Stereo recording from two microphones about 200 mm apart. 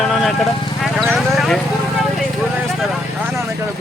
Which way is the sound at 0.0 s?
Centre (ahead or behind).